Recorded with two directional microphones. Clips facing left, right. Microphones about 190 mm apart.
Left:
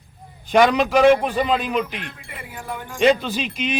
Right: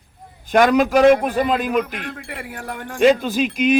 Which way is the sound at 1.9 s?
50° right (ahead or behind).